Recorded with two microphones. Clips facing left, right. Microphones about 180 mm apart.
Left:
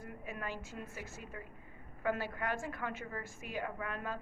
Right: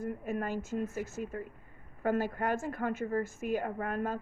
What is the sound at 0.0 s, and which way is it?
A woman's voice, 45° right (ahead or behind).